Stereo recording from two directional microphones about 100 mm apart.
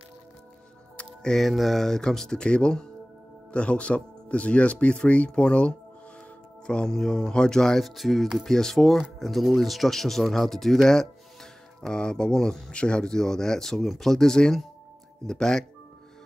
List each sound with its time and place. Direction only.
0.9 s speech: 5° left (ahead or behind)